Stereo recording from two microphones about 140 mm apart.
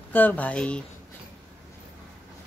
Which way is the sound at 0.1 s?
15° left (ahead or behind).